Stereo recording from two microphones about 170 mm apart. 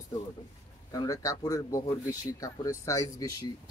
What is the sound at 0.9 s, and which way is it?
Speech, 20° left (ahead or behind).